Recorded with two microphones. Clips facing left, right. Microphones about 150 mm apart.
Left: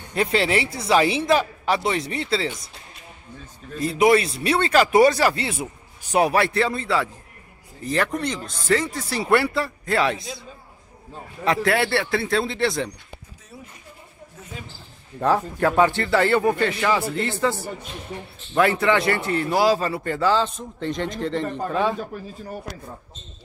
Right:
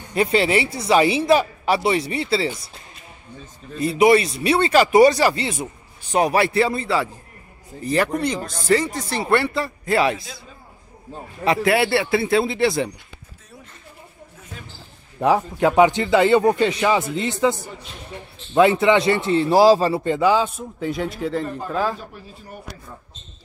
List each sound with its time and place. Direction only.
0.1 s a man's voice: centre (ahead or behind)
3.7 s a man's voice: 5° right (ahead or behind)
11.4 s a man's voice: 10° right (ahead or behind)
15.1 s a man's voice: 15° right (ahead or behind)
19.5 s speech: 35° right (ahead or behind)
20.0 s a man's voice: 15° right (ahead or behind)